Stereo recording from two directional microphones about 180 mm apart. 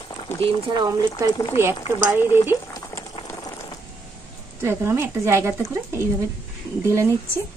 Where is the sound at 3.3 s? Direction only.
20° left (ahead or behind).